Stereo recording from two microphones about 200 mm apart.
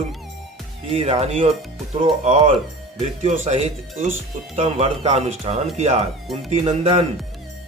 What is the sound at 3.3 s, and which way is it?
Speech, 30° right (ahead or behind).